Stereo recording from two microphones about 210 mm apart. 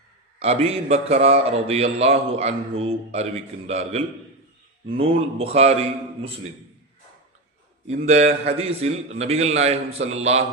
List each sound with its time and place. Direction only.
0.3 s a man's voice: 30° right (ahead or behind)
8.0 s a man's voice: 30° right (ahead or behind)